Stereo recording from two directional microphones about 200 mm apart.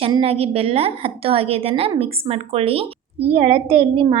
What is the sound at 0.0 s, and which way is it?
A woman's voice, 30° right (ahead or behind).